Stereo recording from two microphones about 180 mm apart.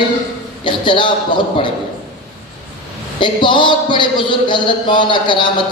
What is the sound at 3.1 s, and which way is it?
A man's voice, 25° left (ahead or behind).